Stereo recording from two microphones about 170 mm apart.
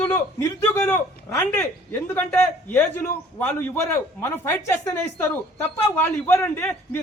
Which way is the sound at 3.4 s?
10° left (ahead or behind).